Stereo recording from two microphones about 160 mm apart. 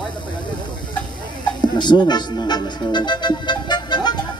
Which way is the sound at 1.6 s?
30° left (ahead or behind).